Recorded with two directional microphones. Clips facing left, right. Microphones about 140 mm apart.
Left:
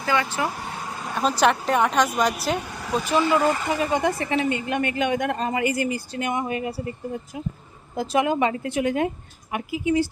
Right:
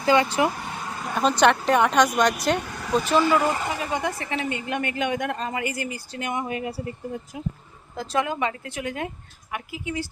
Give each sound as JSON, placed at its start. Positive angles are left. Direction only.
{"t": 0.0, "sound": "speech", "side_deg": -25}
{"t": 1.1, "sound": "a woman's voice", "side_deg": 5}
{"t": 3.9, "sound": "speech", "side_deg": 20}
{"t": 7.9, "sound": "speech", "side_deg": 15}